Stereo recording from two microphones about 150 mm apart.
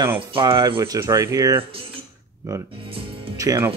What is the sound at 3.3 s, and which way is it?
Speech, 20° right (ahead or behind).